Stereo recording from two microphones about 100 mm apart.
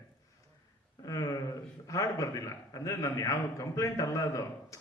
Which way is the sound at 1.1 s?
35° left (ahead or behind).